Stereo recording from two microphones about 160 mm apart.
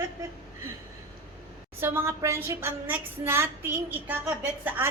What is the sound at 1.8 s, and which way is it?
A woman's voice, 15° right (ahead or behind).